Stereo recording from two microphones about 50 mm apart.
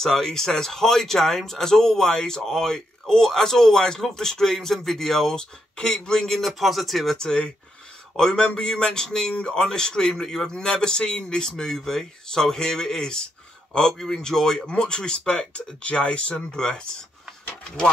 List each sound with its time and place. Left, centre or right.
0.0 s speech: centre
7.2 s speech: centre